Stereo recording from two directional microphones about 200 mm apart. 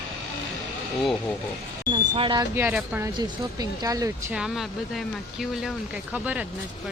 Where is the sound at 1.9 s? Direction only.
25° right (ahead or behind).